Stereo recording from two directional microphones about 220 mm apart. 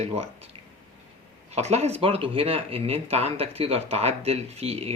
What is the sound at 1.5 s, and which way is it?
Speech, 30° right (ahead or behind).